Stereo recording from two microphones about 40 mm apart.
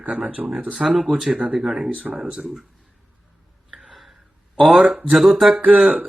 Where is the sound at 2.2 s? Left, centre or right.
Right.